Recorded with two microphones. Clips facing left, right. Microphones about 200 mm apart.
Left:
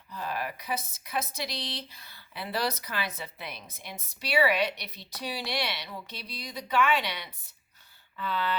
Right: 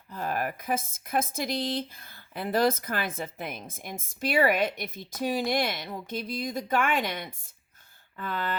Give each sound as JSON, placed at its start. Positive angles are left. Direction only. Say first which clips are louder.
{"t": 0.1, "sound": "a woman's voice", "louder": "right 4 dB", "side_deg": -50}